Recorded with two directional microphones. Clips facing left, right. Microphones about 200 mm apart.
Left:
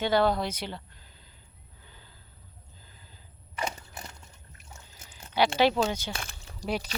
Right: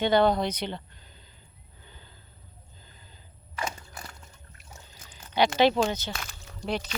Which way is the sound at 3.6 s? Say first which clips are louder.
Even; 20° left (ahead or behind).